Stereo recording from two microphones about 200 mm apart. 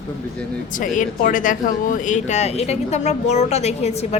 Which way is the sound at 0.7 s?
40° left (ahead or behind).